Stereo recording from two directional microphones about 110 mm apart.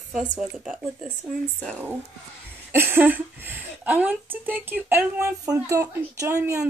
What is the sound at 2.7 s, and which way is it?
Speech, 20° right (ahead or behind).